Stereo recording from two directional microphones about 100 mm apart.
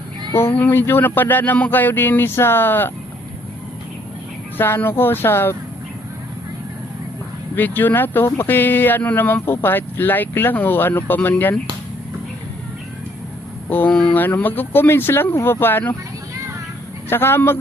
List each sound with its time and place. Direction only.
0.5 s speech: 15° left (ahead or behind)
4.5 s speech: 20° left (ahead or behind)
7.5 s speech: 20° left (ahead or behind)
13.7 s speech: 15° left (ahead or behind)
17.1 s speech: 25° left (ahead or behind)